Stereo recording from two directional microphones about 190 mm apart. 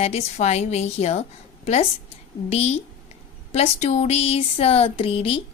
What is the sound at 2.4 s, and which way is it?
Speech, 35° left (ahead or behind).